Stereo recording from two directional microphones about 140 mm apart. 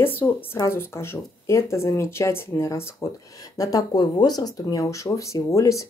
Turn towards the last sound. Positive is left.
turn(degrees=20)  # may be behind; listen again after turning